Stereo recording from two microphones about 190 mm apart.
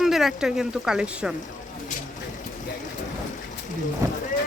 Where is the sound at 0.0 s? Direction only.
Centre (ahead or behind).